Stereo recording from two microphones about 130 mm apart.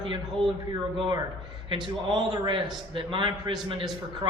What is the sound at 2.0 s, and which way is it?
A man's voice, 30° right (ahead or behind).